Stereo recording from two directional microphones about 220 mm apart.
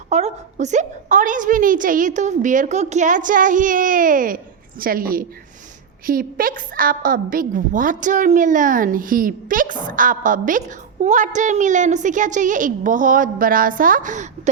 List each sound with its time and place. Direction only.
0.1 s a woman's voice: 30° right (ahead or behind)